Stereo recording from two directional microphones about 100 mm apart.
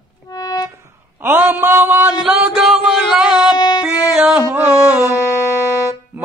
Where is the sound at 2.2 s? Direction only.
5° right (ahead or behind).